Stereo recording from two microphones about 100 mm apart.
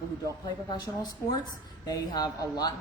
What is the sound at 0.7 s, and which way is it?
A man's voice, 45° left (ahead or behind).